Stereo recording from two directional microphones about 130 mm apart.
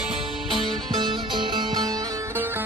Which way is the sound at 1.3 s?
35° right (ahead or behind).